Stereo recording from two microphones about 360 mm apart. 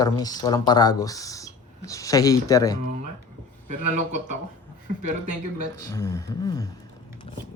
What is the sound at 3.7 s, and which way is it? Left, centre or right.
A man's voice, centre.